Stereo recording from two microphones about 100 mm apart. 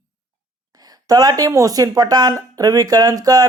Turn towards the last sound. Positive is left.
turn(degrees=-40)  # may be behind; listen again after turning